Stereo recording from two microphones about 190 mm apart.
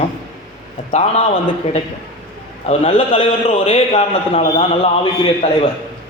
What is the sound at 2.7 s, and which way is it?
A man's voice, 30° left (ahead or behind).